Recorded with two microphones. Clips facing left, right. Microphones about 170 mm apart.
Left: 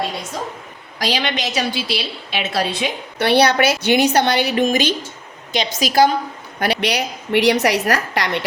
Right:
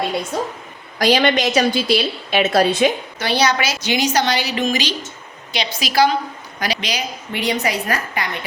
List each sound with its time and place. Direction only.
0.9 s a woman's voice: 50° right (ahead or behind)
3.2 s a woman's voice: 60° left (ahead or behind); by 6.1 s 45° left (ahead or behind)
6.6 s a woman's voice: 60° left (ahead or behind); by 8.4 s 75° left (ahead or behind)